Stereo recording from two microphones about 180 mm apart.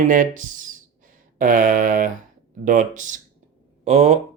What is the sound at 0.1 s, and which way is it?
Speech, 45° right (ahead or behind).